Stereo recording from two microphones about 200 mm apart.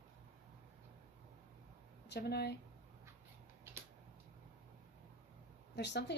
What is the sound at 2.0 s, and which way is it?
Speech, 55° left (ahead or behind).